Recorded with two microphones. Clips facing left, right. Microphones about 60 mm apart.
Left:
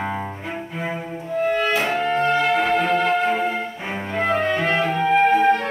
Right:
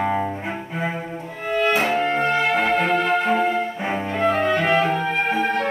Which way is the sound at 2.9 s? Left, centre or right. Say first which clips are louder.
Even; centre.